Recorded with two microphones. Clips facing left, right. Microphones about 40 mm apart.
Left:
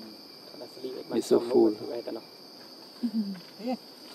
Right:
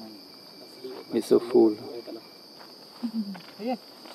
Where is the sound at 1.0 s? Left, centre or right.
Centre.